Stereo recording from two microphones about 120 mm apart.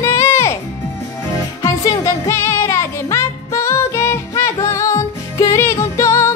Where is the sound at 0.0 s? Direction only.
20° left (ahead or behind).